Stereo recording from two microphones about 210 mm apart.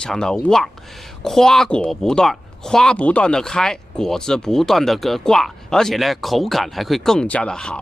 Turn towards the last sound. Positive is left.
turn(degrees=5)  # may be behind; listen again after turning